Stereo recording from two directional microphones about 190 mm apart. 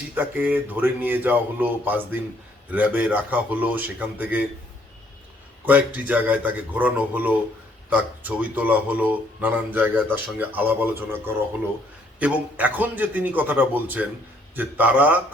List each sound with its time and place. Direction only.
0.1 s speech: 10° right (ahead or behind)
5.6 s speech: 10° right (ahead or behind)